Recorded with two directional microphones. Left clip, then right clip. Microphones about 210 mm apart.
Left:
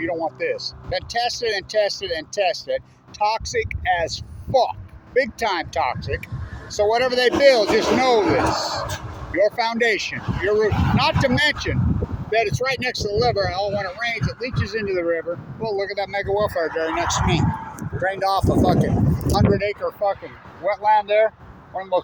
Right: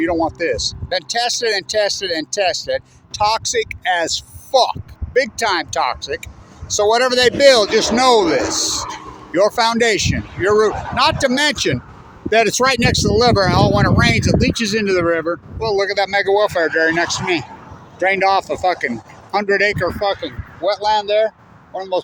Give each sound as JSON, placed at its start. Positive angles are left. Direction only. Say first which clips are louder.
{"t": 0.0, "sound": "speech", "louder": "right 6 dB", "side_deg": -45}
{"t": 20.9, "sound": "speech", "louder": "left 2 dB", "side_deg": -25}